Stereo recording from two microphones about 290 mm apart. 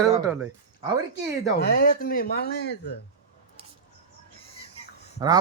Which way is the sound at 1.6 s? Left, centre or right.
Left.